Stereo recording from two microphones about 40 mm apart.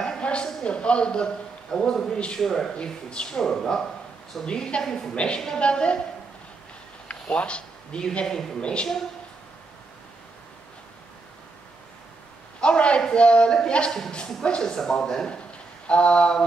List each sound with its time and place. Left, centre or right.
0.2 s a sound: left
0.7 s speech: left; by 2.7 s centre
2.7 s speech: left
4.5 s speech: left
4.8 s speech: centre
5.1 s speech: left
7.3 s speech: left
12.5 s a sound: left
13.1 s speech: left
15.9 s speech: left